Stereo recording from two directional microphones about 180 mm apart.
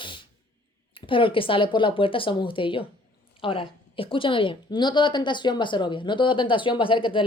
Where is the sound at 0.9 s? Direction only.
30° left (ahead or behind).